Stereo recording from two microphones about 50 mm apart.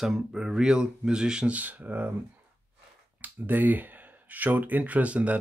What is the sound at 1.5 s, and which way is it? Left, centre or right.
Speech, right.